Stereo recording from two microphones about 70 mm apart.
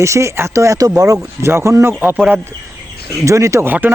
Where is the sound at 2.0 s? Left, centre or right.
Right.